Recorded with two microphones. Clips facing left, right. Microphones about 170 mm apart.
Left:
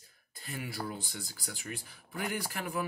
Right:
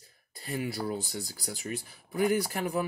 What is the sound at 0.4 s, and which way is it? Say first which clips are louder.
Speech: right 6 dB; 40° right (ahead or behind).